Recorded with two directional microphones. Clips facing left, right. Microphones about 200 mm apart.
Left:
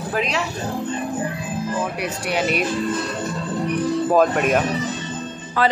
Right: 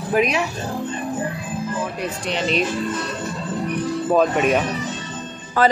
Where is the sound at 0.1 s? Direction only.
15° right (ahead or behind).